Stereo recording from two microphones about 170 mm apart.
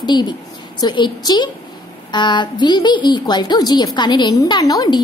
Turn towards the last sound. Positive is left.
turn(degrees=25)  # may be behind; listen again after turning